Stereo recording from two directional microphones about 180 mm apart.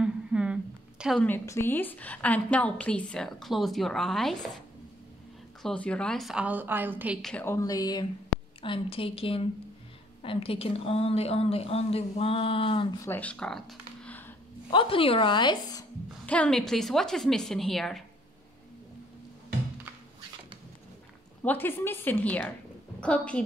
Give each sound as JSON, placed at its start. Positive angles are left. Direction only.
{"t": 0.0, "sound": "a sound", "side_deg": -5}
{"t": 1.2, "sound": "a woman's voice", "side_deg": 15}
{"t": 5.6, "sound": "a woman's voice", "side_deg": 5}
{"t": 7.2, "sound": "a woman's voice", "side_deg": 5}
{"t": 7.4, "sound": "a woman's voice", "side_deg": 20}
{"t": 13.0, "sound": "speech", "side_deg": 10}
{"t": 14.7, "sound": "speech", "side_deg": 30}
{"t": 16.3, "sound": "a woman's voice", "side_deg": 5}
{"t": 21.4, "sound": "a woman's voice", "side_deg": 10}